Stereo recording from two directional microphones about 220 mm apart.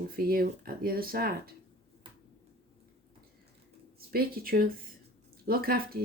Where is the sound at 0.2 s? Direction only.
40° right (ahead or behind).